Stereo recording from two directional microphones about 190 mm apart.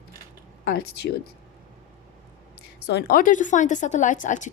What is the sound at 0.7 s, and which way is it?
Speech, 60° left (ahead or behind).